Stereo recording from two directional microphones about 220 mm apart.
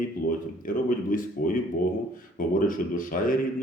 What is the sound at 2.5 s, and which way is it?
Speech, 40° left (ahead or behind).